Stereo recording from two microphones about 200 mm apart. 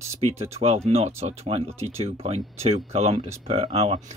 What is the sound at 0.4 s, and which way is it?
Speech, 30° right (ahead or behind).